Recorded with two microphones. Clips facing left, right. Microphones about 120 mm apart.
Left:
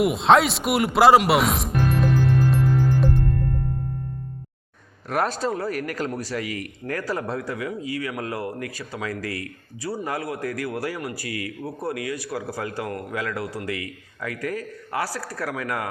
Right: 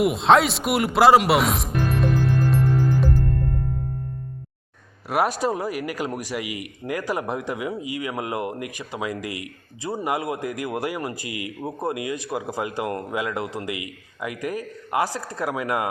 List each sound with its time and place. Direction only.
0.0 s music: centre (ahead or behind)
5.0 s speech: 10° right (ahead or behind)